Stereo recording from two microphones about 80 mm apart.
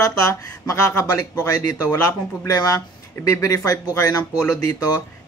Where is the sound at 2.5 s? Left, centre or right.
Left.